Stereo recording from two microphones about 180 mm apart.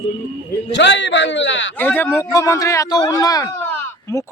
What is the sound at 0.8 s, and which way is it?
Speech, 80° left.